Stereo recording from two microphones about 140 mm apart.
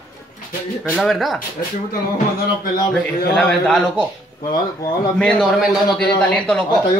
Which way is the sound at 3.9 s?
30° left (ahead or behind).